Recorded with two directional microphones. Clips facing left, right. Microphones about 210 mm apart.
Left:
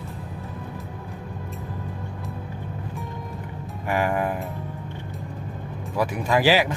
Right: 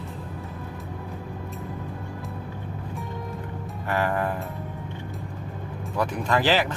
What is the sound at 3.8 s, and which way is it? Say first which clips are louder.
Music: left 2 dB; 15° left (ahead or behind).